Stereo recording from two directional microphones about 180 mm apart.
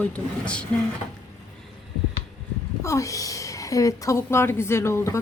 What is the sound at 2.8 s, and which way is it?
A woman's voice, 15° left (ahead or behind).